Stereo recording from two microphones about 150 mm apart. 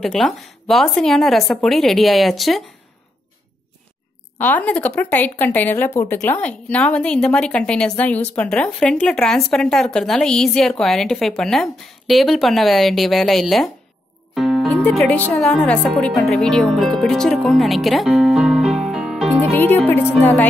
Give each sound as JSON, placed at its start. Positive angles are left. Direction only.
{"t": 0.0, "sound": "a woman's voice", "side_deg": 0}
{"t": 4.4, "sound": "a woman's voice", "side_deg": 10}
{"t": 14.3, "sound": "music", "side_deg": 0}
{"t": 14.8, "sound": "speech", "side_deg": 10}
{"t": 19.5, "sound": "a woman's voice", "side_deg": 15}